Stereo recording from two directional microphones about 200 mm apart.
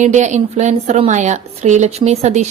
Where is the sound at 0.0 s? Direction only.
35° right (ahead or behind).